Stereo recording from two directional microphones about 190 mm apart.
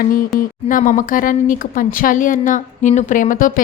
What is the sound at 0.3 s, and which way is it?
A woman's voice, 45° left (ahead or behind).